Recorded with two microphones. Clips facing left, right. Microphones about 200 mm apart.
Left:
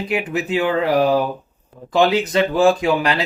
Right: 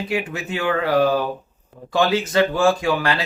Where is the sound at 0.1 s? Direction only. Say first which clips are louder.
Left 7 dB; 20° left (ahead or behind).